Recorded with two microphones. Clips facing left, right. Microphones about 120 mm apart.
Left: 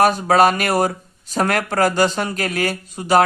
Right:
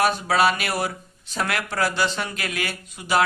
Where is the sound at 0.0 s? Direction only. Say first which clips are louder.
Left 6 dB; 45° left (ahead or behind).